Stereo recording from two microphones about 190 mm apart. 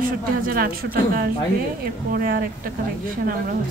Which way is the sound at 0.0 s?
50° right (ahead or behind).